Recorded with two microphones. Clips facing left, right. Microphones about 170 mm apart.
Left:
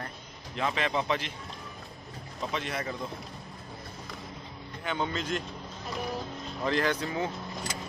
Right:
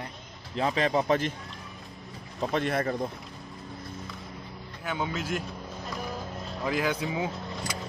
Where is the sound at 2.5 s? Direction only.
55° right (ahead or behind).